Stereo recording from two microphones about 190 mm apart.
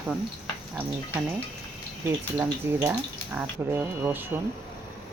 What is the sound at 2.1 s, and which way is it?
Speech, 10° right (ahead or behind).